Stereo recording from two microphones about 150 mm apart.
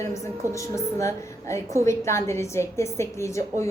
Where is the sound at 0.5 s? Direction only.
20° left (ahead or behind).